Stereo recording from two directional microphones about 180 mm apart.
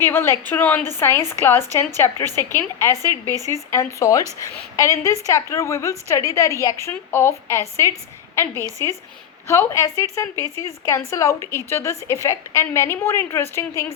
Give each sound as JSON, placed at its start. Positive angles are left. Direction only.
{"t": 0.0, "sound": "a woman's voice", "side_deg": 15}
{"t": 3.3, "sound": "speech", "side_deg": -20}
{"t": 3.7, "sound": "a woman's voice", "side_deg": 15}
{"t": 8.8, "sound": "a woman's voice", "side_deg": 15}